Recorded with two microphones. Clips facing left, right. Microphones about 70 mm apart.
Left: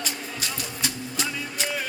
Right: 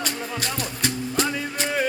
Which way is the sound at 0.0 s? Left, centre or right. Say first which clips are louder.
Right 4 dB; right.